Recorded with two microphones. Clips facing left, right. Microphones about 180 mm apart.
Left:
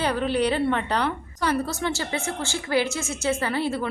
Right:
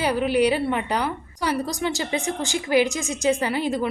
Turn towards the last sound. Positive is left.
turn(degrees=-15)  # may be behind; listen again after turning